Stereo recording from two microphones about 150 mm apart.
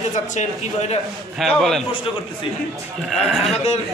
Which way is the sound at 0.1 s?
50° left (ahead or behind).